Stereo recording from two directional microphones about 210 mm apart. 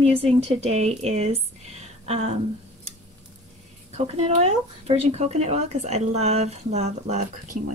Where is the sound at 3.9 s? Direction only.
30° right (ahead or behind).